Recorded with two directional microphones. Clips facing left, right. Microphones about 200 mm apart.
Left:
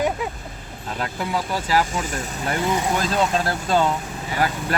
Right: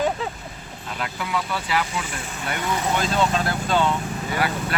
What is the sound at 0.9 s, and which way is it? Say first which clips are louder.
Speech: left 2 dB; 40° left (ahead or behind).